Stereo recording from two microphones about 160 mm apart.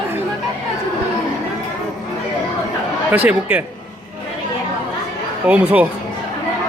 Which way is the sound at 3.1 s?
10° right (ahead or behind).